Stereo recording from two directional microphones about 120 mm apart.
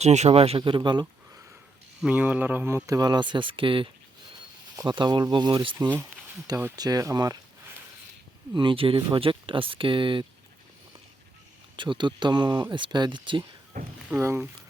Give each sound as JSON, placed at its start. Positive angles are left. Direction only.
{"t": 0.0, "sound": "speech", "side_deg": -70}
{"t": 2.0, "sound": "speech", "side_deg": -10}
{"t": 5.9, "sound": "speech", "side_deg": -15}
{"t": 6.7, "sound": "speech", "side_deg": -30}
{"t": 8.5, "sound": "speech", "side_deg": -45}
{"t": 11.8, "sound": "speech", "side_deg": -40}
{"t": 14.2, "sound": "speech", "side_deg": -20}